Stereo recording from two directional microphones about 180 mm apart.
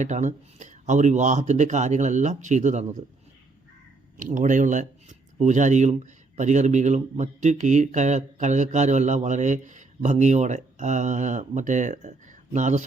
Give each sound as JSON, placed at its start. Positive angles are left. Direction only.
{"t": 0.0, "sound": "speech", "side_deg": -40}
{"t": 4.2, "sound": "speech", "side_deg": -45}